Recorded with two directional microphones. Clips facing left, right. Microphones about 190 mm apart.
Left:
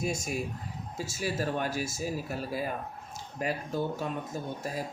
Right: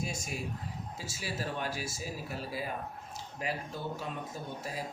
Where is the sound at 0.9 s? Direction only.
45° left (ahead or behind).